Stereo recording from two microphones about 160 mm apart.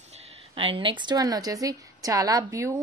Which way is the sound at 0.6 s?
35° right (ahead or behind).